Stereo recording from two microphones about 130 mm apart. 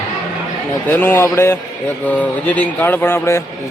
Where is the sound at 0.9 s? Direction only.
15° left (ahead or behind).